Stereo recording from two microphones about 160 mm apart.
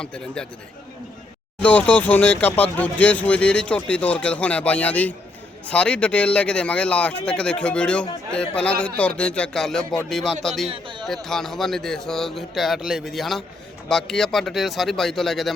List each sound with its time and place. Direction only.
0.0 s speech: 5° left (ahead or behind)
1.6 s speech: 10° left (ahead or behind)
10.7 s speech: 30° right (ahead or behind)
11.0 s speech: centre (ahead or behind)